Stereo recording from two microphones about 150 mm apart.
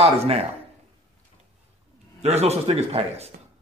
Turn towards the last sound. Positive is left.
turn(degrees=-45)  # may be behind; listen again after turning